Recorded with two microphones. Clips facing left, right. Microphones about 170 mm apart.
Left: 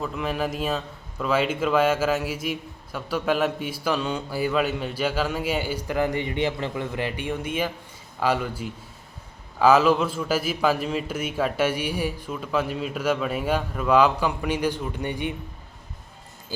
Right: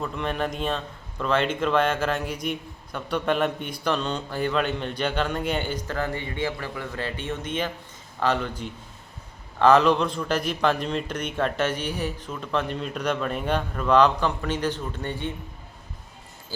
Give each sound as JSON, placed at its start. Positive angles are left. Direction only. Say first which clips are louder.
{"t": 0.0, "sound": "a man's voice", "louder": "left 1 dB", "side_deg": 5}
{"t": 16.5, "sound": "speech", "louder": "left 3 dB", "side_deg": 15}